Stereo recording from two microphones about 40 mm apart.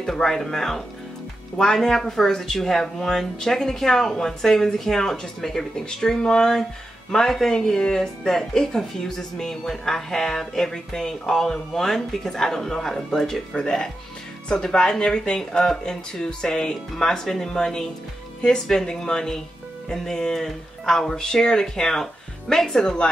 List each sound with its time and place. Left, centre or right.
0.0 s speech: centre
13.6 s speech: left
18.9 s speech: centre